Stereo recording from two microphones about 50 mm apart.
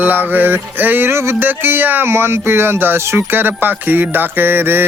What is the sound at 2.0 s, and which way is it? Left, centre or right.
Speech, right.